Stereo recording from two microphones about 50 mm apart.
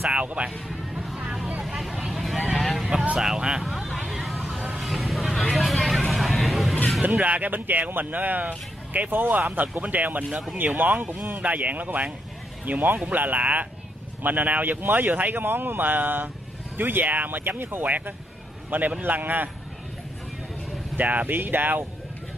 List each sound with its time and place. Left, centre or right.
0.1 s speech: right
1.2 s vehicle: centre
3.2 s speech: centre
3.6 s vehicle: centre
6.4 s a sound: centre
7.0 s speech: right
9.1 s speech: right
20.9 s speech: right